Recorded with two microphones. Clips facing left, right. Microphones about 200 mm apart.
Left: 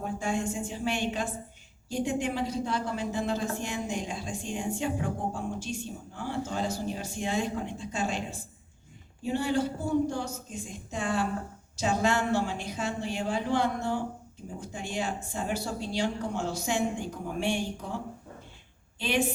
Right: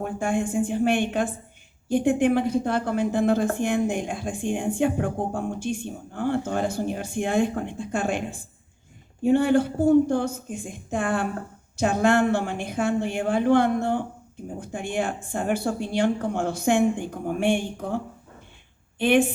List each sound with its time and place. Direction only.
0.0 s a woman's voice: 55° right (ahead or behind)